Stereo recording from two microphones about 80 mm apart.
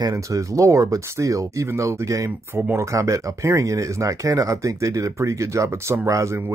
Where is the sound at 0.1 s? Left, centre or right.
Right.